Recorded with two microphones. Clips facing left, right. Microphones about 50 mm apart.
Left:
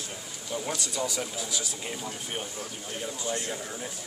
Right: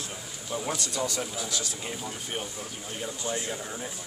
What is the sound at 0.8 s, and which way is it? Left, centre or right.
Speech, centre.